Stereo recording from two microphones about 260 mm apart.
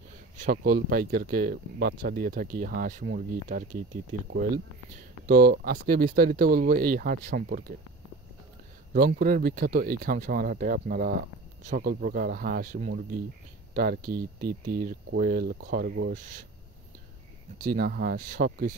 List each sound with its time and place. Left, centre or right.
0.4 s speech: right
5.2 s speech: right
8.9 s speech: right
17.6 s speech: right